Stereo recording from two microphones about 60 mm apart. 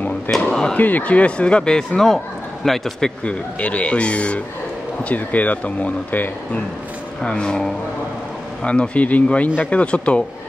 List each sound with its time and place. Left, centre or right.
0.3 s speech: centre
0.7 s speech: left; by 3.1 s centre
3.3 s speech: left
7.2 s speech: centre